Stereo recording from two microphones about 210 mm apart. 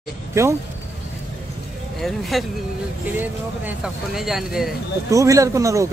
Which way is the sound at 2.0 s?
Centre (ahead or behind).